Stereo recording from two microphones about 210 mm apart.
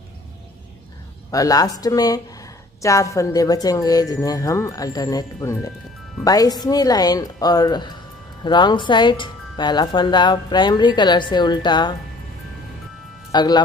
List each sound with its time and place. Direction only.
1.3 s speech: 15° left (ahead or behind)
13.3 s speech: 20° left (ahead or behind)